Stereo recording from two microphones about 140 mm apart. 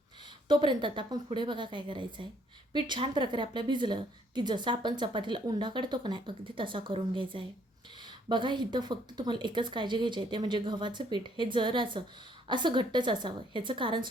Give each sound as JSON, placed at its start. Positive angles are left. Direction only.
{"t": 0.4, "sound": "a woman's voice", "side_deg": -35}